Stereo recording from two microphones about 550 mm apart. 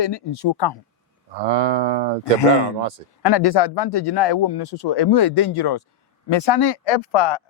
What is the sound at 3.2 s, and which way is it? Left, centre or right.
Speech, left.